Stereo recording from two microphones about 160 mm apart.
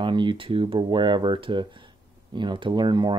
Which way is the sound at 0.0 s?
30° right (ahead or behind).